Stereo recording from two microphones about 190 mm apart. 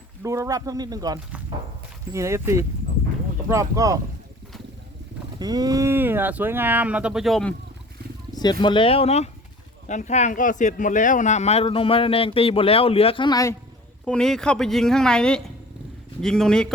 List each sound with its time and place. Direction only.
0.2 s speech: 15° right (ahead or behind)
5.4 s speech: 20° right (ahead or behind); by 7.5 s centre (ahead or behind)
8.3 s speech: 20° left (ahead or behind)
14.0 s speech: 5° left (ahead or behind)